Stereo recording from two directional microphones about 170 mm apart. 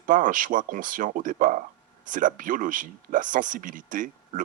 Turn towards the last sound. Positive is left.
turn(degrees=-50)  # may be behind; listen again after turning